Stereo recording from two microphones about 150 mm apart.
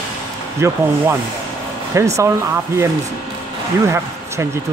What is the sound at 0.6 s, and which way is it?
Speech, 20° right (ahead or behind).